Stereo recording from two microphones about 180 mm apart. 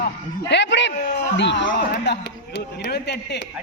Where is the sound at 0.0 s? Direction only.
75° left (ahead or behind).